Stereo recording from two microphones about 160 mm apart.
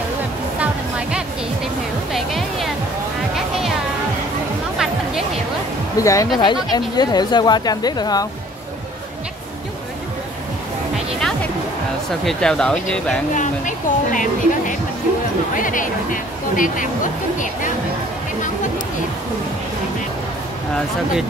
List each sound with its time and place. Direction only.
0.6 s music: 5° right (ahead or behind)
5.9 s speech: 20° left (ahead or behind)
12.3 s speech: 5° left (ahead or behind)
13.3 s speech: 50° left (ahead or behind)